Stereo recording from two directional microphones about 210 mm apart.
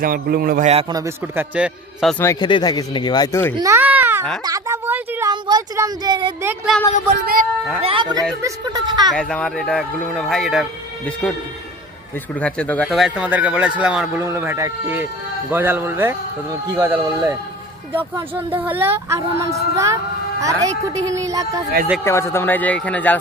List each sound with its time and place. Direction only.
0.0 s a man's voice: 45° right (ahead or behind)
0.7 s a woman's voice: 30° right (ahead or behind)
0.9 s speech: 10° right (ahead or behind)
2.1 s speech: 15° left (ahead or behind)
3.5 s baby cry: 15° right (ahead or behind)
4.5 s a woman's voice: 10° right (ahead or behind)
6.7 s speech: 5° left (ahead or behind)
7.2 s a man's voice: 45° right (ahead or behind)
7.8 s a woman's voice: 25° right (ahead or behind)
9.1 s speech: 5° left (ahead or behind)
12.4 s speech: 5° left (ahead or behind); by 21.6 s 15° right (ahead or behind)
22.0 s speech: 10° left (ahead or behind)